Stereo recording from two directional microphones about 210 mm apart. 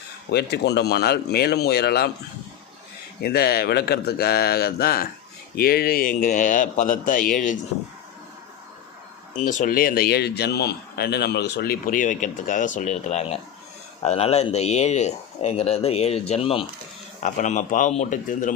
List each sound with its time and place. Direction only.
0.3 s speech: 50° left (ahead or behind)
3.2 s speech: 50° left (ahead or behind)
9.3 s speech: 35° left (ahead or behind)